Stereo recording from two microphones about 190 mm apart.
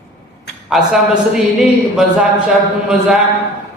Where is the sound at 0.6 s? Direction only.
Centre (ahead or behind).